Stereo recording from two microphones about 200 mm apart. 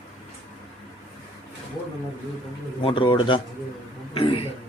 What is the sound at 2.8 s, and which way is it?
Speech, 25° left (ahead or behind).